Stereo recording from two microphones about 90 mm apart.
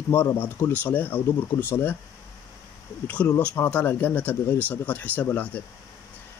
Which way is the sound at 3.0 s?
15° left (ahead or behind).